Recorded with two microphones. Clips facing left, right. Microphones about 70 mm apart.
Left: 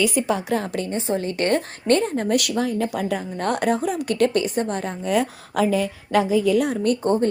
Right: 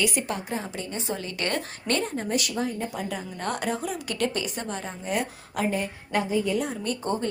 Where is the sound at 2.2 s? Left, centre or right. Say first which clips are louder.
Left 6 dB; left.